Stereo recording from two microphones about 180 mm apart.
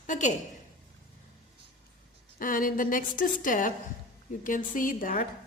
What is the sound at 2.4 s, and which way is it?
A woman's voice, 50° left (ahead or behind).